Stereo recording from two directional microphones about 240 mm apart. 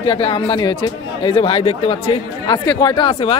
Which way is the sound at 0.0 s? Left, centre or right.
Left.